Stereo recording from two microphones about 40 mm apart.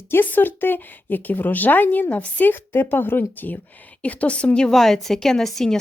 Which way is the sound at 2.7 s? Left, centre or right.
Left.